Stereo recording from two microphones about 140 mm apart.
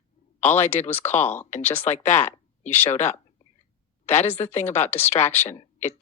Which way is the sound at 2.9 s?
55° left (ahead or behind).